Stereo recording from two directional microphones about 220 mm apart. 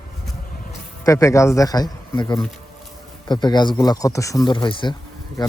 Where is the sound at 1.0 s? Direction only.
15° left (ahead or behind).